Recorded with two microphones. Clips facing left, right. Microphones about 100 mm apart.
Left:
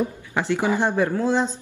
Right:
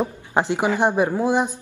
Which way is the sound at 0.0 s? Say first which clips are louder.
Right 3 dB; 20° right (ahead or behind).